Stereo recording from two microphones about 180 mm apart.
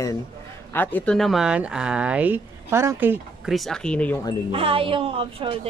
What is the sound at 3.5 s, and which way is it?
Speech, centre (ahead or behind).